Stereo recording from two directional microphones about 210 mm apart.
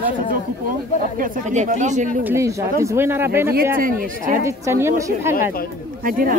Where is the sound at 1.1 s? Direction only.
40° right (ahead or behind).